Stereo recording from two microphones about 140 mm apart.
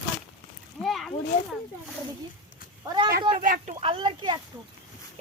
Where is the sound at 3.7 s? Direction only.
40° right (ahead or behind).